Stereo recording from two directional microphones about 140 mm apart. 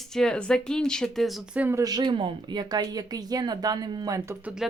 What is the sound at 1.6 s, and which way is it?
Speech, 25° right (ahead or behind).